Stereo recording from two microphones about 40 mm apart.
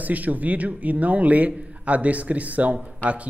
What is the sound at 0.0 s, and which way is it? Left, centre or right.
Speech, right.